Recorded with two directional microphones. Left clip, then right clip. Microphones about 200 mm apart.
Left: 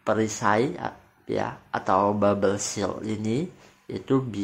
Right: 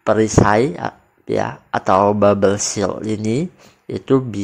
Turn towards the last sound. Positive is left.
turn(degrees=-35)  # may be behind; listen again after turning